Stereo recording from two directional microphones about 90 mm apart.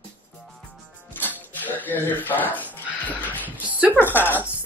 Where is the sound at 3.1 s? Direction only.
20° left (ahead or behind).